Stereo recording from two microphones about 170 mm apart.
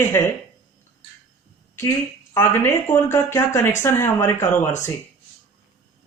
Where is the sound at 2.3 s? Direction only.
15° left (ahead or behind).